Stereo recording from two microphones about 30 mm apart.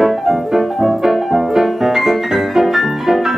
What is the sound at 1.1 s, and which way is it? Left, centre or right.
Piano, centre.